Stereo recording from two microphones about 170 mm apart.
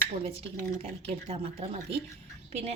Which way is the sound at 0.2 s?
35° right (ahead or behind).